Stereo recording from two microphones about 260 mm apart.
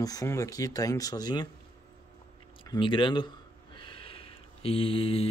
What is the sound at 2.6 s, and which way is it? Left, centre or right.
Speech, centre.